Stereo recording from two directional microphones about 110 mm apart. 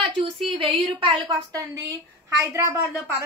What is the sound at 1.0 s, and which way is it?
A woman's voice, 45° right (ahead or behind).